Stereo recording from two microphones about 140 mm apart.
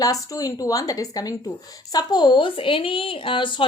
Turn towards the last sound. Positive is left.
turn(degrees=35)  # may be behind; listen again after turning